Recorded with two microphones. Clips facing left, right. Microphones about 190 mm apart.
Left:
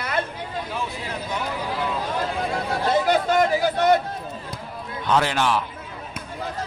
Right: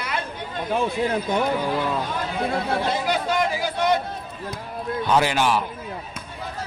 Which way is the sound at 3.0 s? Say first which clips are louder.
Left 3 dB; 50° left (ahead or behind).